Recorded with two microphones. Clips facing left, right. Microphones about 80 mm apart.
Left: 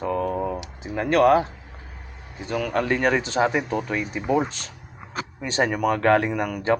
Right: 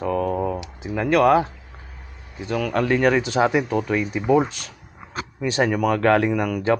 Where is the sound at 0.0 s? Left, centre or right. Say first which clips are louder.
Right 2 dB; centre.